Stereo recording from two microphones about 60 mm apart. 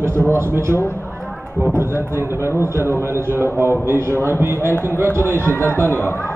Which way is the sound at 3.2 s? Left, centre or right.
Right.